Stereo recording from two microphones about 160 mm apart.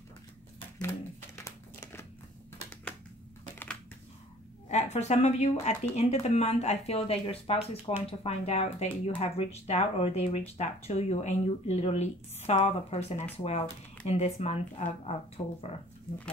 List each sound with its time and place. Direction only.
0.7 s crumpling: 15° left (ahead or behind)
4.6 s speech: 45° left (ahead or behind)